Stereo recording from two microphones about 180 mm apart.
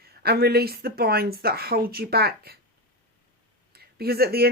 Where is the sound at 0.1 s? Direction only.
60° right (ahead or behind).